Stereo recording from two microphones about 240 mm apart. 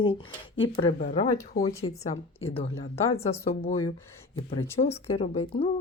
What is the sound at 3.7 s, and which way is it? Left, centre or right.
Speech, left.